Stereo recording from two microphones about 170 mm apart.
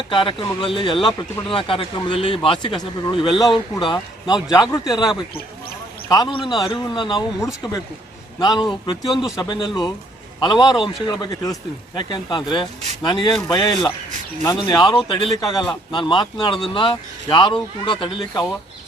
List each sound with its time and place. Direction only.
0.1 s speech: 30° left (ahead or behind)